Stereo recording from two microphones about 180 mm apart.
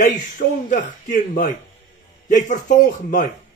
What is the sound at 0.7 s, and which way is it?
Speech, 45° left (ahead or behind).